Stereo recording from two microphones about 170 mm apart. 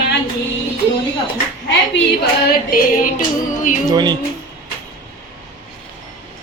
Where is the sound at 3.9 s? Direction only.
25° right (ahead or behind).